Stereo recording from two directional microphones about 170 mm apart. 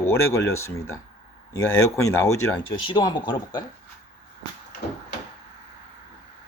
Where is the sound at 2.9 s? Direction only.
30° left (ahead or behind).